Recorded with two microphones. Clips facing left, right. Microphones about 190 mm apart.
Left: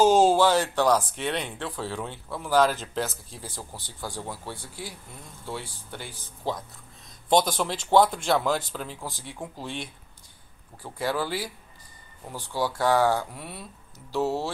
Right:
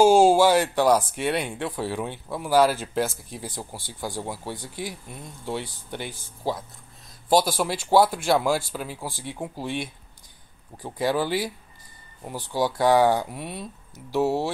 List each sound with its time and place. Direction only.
0.0 s speech: 10° right (ahead or behind)
6.4 s speech: 5° right (ahead or behind)